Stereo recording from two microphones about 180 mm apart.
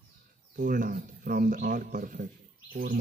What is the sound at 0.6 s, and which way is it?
Speech, 50° right (ahead or behind).